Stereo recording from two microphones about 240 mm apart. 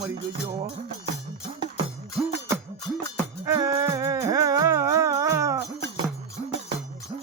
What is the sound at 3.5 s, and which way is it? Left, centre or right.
Music, centre.